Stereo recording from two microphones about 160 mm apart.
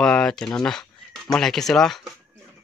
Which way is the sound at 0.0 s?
5° left (ahead or behind).